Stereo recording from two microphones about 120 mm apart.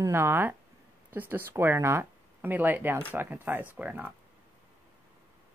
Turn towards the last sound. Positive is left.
turn(degrees=-15)  # may be behind; listen again after turning